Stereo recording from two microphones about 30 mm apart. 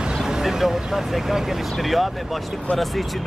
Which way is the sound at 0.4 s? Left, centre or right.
Centre.